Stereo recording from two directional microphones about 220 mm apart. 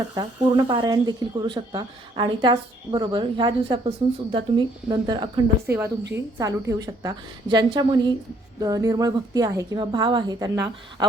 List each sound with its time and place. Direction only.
0.1 s a woman's voice: 20° right (ahead or behind)